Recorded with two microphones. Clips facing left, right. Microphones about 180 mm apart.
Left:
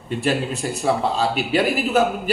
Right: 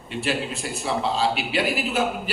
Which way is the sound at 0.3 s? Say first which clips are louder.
Left 5 dB; 45° left (ahead or behind).